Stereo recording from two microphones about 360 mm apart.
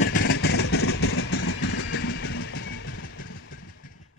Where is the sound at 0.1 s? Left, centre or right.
Left.